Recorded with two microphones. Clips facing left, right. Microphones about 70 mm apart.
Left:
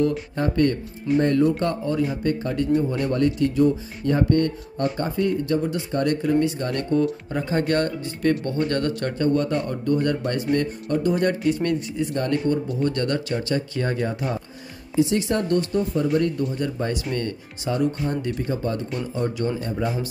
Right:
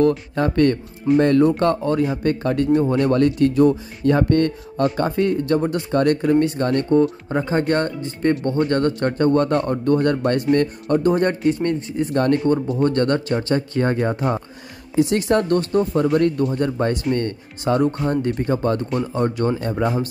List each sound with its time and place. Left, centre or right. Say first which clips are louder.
0.4 s speech: right 3 dB; right
6.4 s speech: right 5 dB; right
7.2 s speech: right 3 dB; right
18.4 s speech: right 5 dB; right